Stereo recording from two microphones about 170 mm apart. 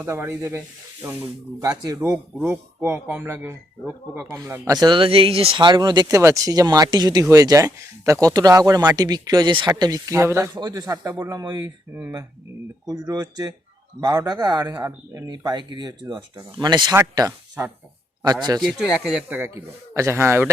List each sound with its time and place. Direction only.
0.0 s speech: 15° right (ahead or behind)
11.9 s speech: 10° right (ahead or behind)
12.8 s speech: 25° right (ahead or behind)
18.6 s speech: centre (ahead or behind)